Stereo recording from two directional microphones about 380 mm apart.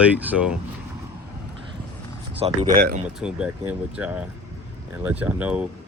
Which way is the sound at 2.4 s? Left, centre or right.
Centre.